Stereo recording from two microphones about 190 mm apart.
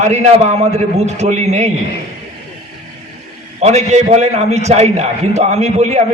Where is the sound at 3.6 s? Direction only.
35° right (ahead or behind).